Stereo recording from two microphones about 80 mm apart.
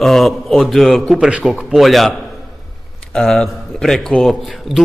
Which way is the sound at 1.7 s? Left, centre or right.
Centre.